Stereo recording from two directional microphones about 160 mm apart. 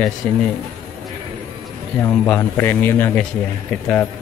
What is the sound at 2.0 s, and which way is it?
A man's voice, 10° left (ahead or behind).